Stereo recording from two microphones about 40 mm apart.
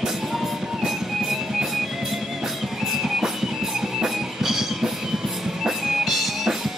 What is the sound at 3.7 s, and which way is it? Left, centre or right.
Music, centre.